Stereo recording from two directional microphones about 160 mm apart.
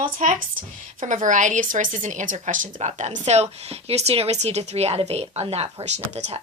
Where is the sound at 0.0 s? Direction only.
55° right (ahead or behind).